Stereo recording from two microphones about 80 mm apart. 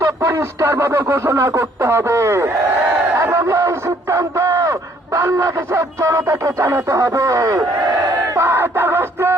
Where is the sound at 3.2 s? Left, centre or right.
Right.